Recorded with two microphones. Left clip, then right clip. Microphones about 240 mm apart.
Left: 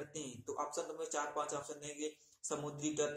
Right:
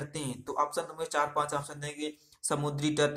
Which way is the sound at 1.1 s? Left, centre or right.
Right.